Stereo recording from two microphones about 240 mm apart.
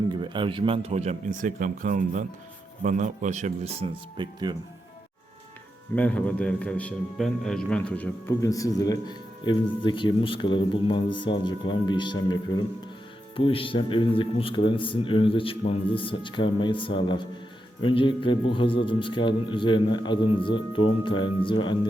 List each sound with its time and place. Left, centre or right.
0.1 s speech: centre
6.0 s a man's voice: centre